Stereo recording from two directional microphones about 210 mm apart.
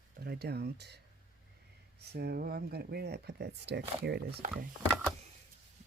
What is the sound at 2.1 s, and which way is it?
Speech, 50° right (ahead or behind).